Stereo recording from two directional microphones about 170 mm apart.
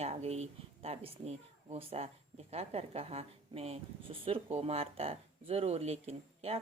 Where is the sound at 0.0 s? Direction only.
40° right (ahead or behind).